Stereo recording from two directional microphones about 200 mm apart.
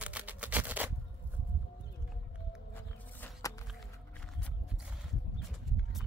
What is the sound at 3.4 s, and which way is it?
Walk, 15° left (ahead or behind).